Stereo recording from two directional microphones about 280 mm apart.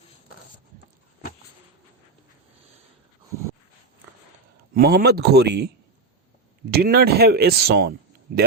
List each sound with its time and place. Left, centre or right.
4.7 s speech: right